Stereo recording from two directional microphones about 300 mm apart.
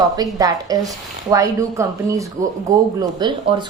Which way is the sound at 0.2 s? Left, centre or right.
Centre.